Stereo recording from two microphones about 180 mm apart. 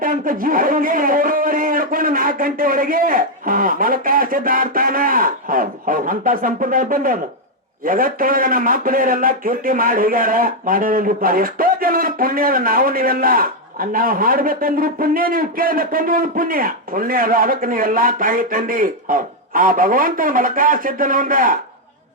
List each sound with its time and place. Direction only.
0.0 s a man's voice: 50° right (ahead or behind)